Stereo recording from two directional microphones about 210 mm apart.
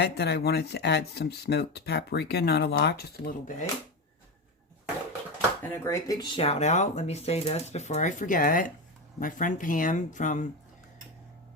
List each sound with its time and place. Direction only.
0.0 s speech: 50° left (ahead or behind)
5.7 s speech: 15° left (ahead or behind); by 10.5 s 35° left (ahead or behind)